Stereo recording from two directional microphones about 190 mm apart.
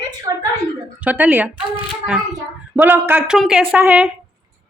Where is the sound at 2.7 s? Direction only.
10° right (ahead or behind).